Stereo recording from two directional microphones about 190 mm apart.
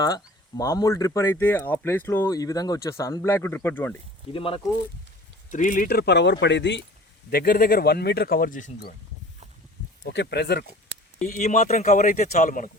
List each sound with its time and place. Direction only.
0.0 s speech: 20° left (ahead or behind)
4.3 s speech: 30° left (ahead or behind)
5.5 s speech: 45° left (ahead or behind); by 6.8 s 65° left (ahead or behind)
7.3 s speech: 50° left (ahead or behind)
10.0 s speech: 65° left (ahead or behind)
11.2 s speech: 45° left (ahead or behind)